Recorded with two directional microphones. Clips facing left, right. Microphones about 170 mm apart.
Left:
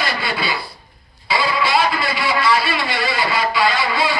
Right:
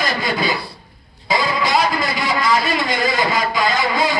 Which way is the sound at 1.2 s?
40° right (ahead or behind).